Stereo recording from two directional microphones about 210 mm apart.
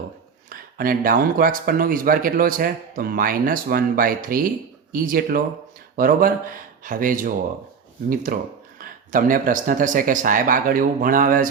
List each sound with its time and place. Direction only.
0.5 s speech: 40° right (ahead or behind)